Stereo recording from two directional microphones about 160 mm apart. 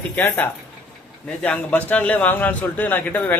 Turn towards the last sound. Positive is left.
turn(degrees=10)  # may be behind; listen again after turning